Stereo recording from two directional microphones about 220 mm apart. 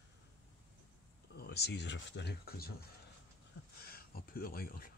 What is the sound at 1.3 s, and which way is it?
Speech, 50° left (ahead or behind).